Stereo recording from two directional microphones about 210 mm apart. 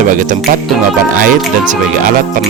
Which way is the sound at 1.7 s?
40° right (ahead or behind).